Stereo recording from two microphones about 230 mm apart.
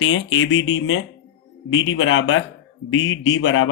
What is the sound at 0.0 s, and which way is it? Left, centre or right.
Speech, left.